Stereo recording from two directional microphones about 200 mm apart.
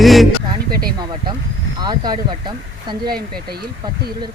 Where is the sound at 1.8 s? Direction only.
20° right (ahead or behind).